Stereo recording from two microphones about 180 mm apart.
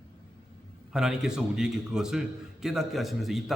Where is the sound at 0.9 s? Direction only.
5° right (ahead or behind).